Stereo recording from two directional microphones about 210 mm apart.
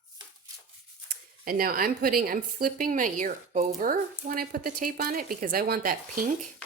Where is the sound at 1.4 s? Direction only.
45° right (ahead or behind).